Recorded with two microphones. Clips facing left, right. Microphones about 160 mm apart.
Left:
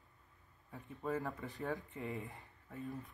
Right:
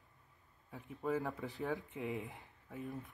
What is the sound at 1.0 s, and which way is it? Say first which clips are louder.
Speech: right 2 dB; centre (ahead or behind).